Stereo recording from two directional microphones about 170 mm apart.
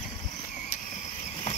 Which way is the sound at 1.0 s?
45° left (ahead or behind).